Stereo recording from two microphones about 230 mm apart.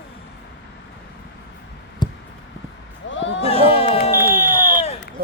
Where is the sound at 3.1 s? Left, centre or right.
Left.